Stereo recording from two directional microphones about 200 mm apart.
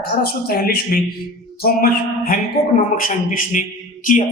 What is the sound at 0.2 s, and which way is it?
A man's voice, 50° left (ahead or behind).